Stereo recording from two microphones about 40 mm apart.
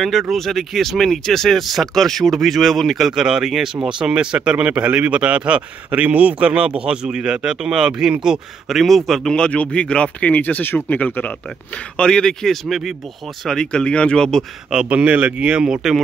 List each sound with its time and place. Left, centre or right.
0.0 s speech: centre
8.6 s speech: centre
9.3 s speech: left
10.3 s speech: left
12.0 s speech: centre
12.6 s speech: centre
13.4 s speech: centre
14.9 s speech: right
15.7 s speech: centre